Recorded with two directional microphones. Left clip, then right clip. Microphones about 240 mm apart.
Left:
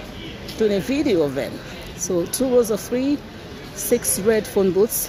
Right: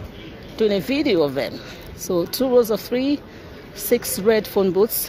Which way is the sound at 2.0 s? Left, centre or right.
Right.